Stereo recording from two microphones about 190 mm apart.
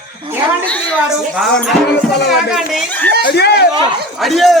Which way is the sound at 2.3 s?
Centre (ahead or behind).